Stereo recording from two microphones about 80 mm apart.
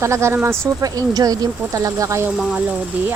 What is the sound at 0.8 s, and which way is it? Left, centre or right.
Speech, right.